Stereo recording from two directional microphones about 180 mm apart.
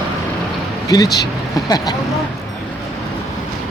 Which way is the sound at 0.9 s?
20° left (ahead or behind).